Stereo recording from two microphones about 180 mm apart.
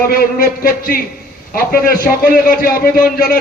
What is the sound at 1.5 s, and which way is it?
A man's voice, 55° left (ahead or behind).